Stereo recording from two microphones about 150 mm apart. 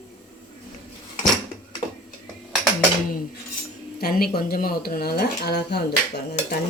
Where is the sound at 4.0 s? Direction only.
90° left.